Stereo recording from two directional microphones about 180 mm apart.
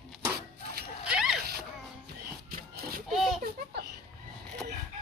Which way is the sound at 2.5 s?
55° right (ahead or behind).